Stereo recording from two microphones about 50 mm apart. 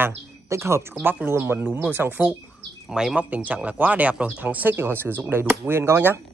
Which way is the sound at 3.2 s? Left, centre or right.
Right.